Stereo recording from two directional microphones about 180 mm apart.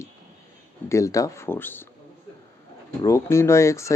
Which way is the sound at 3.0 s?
15° left (ahead or behind).